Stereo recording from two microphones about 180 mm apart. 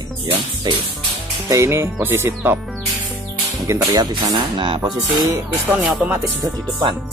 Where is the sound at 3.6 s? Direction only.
20° right (ahead or behind).